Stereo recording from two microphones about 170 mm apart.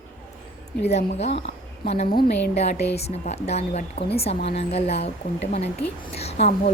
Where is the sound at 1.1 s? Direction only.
35° left (ahead or behind).